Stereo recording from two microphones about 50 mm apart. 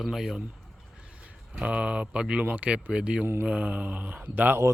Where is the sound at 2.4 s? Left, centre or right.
Right.